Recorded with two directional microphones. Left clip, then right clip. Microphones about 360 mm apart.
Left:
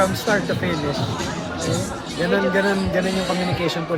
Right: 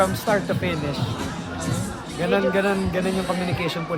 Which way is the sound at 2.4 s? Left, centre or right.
Centre.